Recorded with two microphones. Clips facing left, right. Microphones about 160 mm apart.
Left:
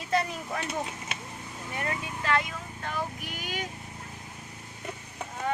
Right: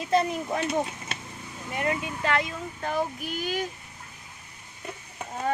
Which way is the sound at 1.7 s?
25° right (ahead or behind).